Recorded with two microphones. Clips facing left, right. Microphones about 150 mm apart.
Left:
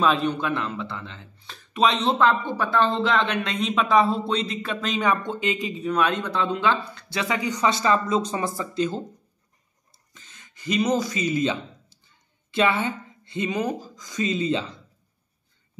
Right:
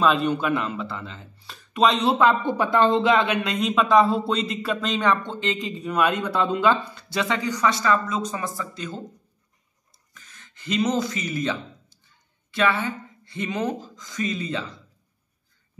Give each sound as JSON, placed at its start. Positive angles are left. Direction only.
{"t": 0.0, "sound": "speech", "side_deg": 0}
{"t": 2.1, "sound": "a man's voice", "side_deg": -15}
{"t": 3.5, "sound": "speech", "side_deg": 0}
{"t": 7.3, "sound": "speech", "side_deg": 20}
{"t": 10.1, "sound": "a sound", "side_deg": 25}
{"t": 10.6, "sound": "a man's voice", "side_deg": 10}
{"t": 13.5, "sound": "speech", "side_deg": 10}